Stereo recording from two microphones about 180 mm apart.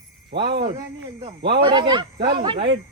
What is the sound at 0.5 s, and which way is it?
Speech, 25° right (ahead or behind).